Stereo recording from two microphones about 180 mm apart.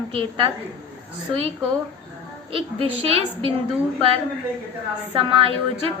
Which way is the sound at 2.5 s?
30° right (ahead or behind).